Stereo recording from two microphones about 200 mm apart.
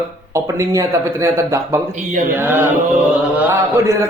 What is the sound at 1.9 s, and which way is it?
Mantra, 35° right (ahead or behind).